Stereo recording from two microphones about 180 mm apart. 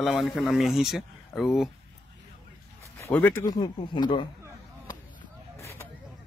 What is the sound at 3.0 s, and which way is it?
Speech, 10° left (ahead or behind).